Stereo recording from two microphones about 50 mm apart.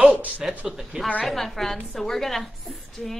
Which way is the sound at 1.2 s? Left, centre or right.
Centre.